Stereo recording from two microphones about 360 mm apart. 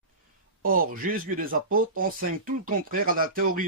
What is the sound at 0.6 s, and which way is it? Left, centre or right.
Speech, right.